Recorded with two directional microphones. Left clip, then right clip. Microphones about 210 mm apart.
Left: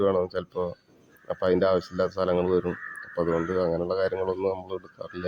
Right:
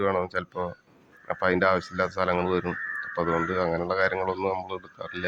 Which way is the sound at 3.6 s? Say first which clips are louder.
Even; 15° right (ahead or behind).